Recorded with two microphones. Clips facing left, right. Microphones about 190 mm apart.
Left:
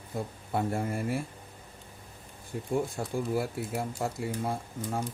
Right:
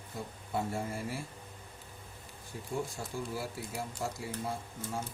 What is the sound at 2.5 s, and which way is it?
Speech, 60° left (ahead or behind).